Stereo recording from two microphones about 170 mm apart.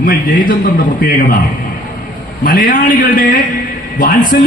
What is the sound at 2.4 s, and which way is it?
A man's voice, 55° left (ahead or behind).